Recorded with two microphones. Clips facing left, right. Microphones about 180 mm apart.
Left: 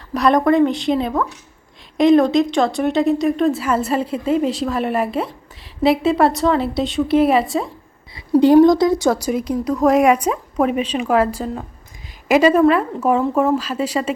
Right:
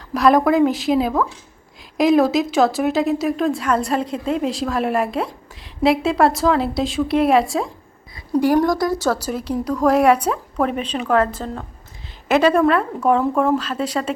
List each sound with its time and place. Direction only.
0.1 s a woman's voice: centre (ahead or behind)
8.6 s speech: 20° left (ahead or behind)